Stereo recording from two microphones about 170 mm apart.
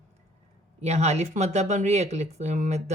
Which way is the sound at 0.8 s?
40° right (ahead or behind).